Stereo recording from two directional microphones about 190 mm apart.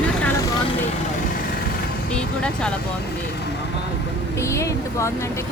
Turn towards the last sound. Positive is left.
turn(degrees=15)  # may be behind; listen again after turning